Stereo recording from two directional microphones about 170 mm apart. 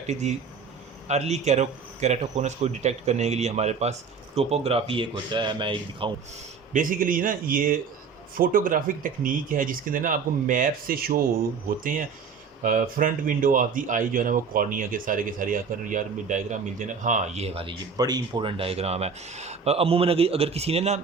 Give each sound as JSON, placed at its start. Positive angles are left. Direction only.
{"t": 0.1, "sound": "speech", "side_deg": -45}
{"t": 6.7, "sound": "speech", "side_deg": -55}